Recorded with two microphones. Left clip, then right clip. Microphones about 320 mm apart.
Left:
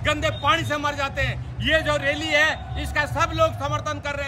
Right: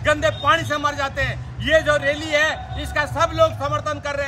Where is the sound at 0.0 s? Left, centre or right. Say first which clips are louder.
Right 4 dB; centre.